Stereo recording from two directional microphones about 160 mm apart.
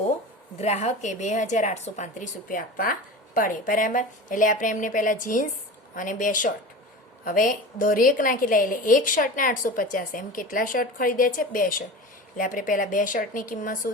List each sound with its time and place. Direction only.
0.6 s speech: 45° left (ahead or behind)